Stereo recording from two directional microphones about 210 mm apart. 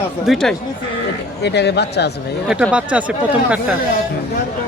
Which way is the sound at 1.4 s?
50° left (ahead or behind).